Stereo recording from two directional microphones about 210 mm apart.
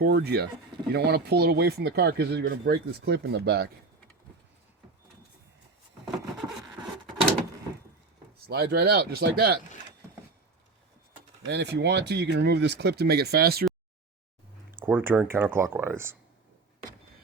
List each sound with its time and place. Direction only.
0.0 s speech: 50° right (ahead or behind)
8.4 s speech: 50° right (ahead or behind)
11.4 s speech: 55° right (ahead or behind)
14.8 s speech: 10° right (ahead or behind)